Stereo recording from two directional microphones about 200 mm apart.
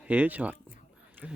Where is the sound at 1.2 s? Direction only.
5° right (ahead or behind).